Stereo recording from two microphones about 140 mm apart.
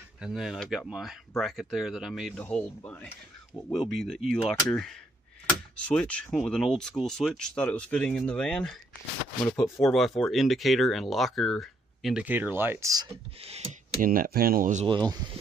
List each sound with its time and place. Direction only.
0.2 s speech: centre (ahead or behind)
2.3 s speech: 10° left (ahead or behind); by 12.9 s 15° right (ahead or behind)
12.9 s speech: 30° right (ahead or behind)
14.0 s speech: 90° right; by 14.9 s 70° right (ahead or behind)
14.9 s speech: 30° right (ahead or behind)